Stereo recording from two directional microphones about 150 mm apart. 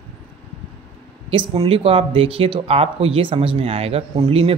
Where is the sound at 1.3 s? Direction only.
40° right (ahead or behind).